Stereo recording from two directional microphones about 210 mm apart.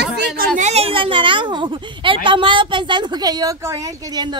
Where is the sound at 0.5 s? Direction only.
30° right (ahead or behind).